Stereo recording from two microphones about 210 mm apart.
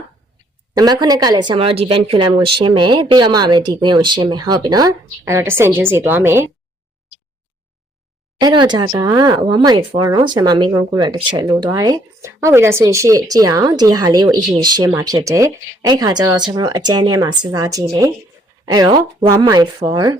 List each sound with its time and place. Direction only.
0.7 s speech: 20° right (ahead or behind)
8.4 s speech: 20° right (ahead or behind)